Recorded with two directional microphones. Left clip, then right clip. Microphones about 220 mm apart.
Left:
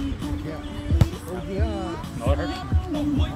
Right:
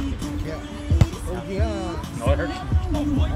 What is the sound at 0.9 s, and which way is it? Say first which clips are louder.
Music: right 1 dB; 45° right (ahead or behind).